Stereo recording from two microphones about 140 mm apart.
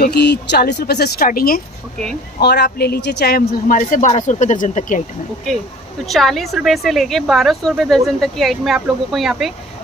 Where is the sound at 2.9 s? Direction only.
90° left; by 5.0 s 70° left (ahead or behind).